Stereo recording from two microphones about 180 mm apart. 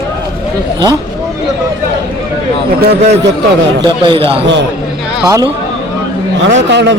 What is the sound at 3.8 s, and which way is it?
Speech, 30° right (ahead or behind).